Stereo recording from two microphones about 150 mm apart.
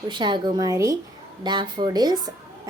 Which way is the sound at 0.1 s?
30° right (ahead or behind).